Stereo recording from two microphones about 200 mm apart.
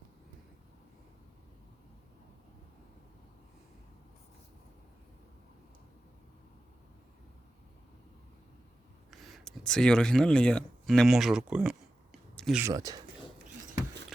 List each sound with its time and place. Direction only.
9.0 s speech: centre (ahead or behind)
12.4 s a sound: centre (ahead or behind)
12.6 s speech: 20° right (ahead or behind)